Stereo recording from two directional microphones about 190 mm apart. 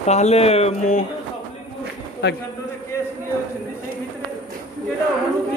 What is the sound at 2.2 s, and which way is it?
Speech, 60° left (ahead or behind).